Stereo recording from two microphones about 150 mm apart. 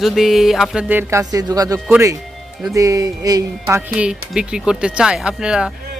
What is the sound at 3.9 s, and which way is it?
Speech, 5° right (ahead or behind).